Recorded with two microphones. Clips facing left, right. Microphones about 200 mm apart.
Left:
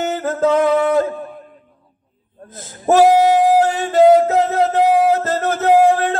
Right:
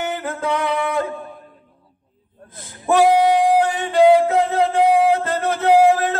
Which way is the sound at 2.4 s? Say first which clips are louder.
Left 5 dB; 45° left (ahead or behind).